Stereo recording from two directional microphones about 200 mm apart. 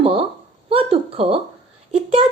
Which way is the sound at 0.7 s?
30° right (ahead or behind).